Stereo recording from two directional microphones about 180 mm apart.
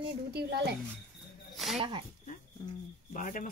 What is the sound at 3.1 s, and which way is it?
Speech, 45° left (ahead or behind).